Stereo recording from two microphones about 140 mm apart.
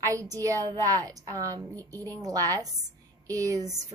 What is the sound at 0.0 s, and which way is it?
A woman's voice, 25° right (ahead or behind).